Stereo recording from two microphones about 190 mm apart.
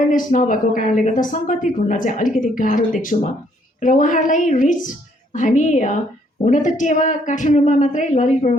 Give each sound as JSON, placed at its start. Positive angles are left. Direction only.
{"t": 0.1, "sound": "a woman's voice", "side_deg": 45}